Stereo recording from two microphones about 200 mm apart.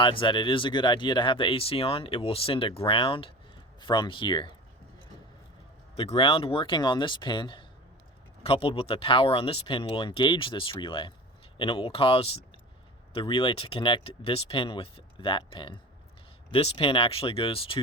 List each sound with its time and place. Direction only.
0.0 s speech: 25° left (ahead or behind)
6.0 s speech: 30° left (ahead or behind)